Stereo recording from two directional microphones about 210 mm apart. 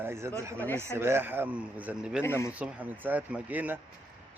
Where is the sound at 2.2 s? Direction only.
10° left (ahead or behind).